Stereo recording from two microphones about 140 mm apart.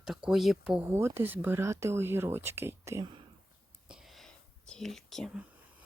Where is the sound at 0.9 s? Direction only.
15° right (ahead or behind).